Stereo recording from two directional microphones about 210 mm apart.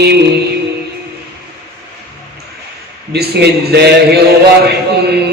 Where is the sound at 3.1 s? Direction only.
50° right (ahead or behind).